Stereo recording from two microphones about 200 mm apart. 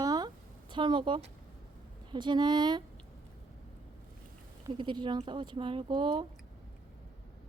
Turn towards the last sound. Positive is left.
turn(degrees=-25)  # may be behind; listen again after turning